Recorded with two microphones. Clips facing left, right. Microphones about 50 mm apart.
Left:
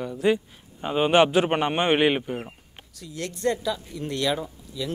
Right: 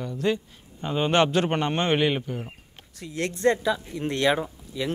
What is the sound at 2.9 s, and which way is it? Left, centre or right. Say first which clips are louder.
Speech: right 4 dB; right.